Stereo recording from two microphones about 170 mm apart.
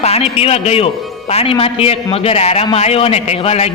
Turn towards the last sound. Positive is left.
turn(degrees=40)  # may be behind; listen again after turning